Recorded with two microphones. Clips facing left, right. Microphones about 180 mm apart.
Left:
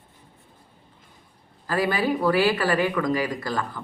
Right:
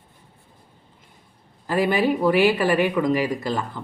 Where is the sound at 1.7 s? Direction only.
20° right (ahead or behind).